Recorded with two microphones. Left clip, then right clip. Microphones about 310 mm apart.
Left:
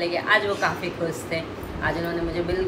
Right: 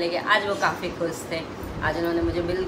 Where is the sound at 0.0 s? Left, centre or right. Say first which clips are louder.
Left 1 dB; centre.